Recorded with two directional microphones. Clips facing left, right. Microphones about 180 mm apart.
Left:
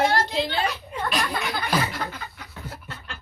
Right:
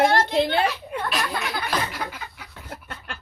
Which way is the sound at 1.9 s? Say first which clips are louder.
Even; 10° right (ahead or behind).